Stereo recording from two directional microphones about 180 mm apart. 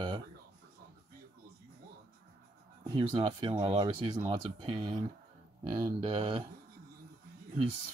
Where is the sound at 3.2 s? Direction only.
25° right (ahead or behind).